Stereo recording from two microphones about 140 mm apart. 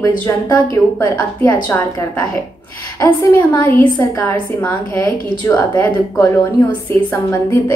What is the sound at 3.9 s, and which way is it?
Speech, 25° left (ahead or behind).